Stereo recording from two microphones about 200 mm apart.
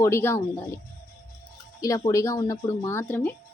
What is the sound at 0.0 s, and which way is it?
Speech, 10° left (ahead or behind).